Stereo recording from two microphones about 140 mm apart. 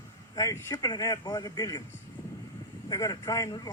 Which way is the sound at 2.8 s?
25° left (ahead or behind).